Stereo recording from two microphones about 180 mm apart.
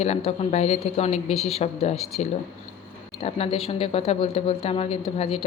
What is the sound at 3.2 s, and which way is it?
Speech, 35° left (ahead or behind).